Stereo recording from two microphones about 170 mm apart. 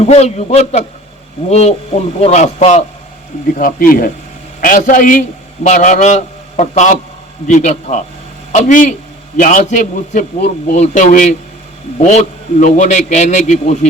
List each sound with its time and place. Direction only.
0.0 s a man's voice: 40° left (ahead or behind)
3.6 s a man's voice: 55° left (ahead or behind)